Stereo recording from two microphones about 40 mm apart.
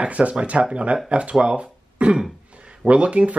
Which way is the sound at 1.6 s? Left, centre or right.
Right.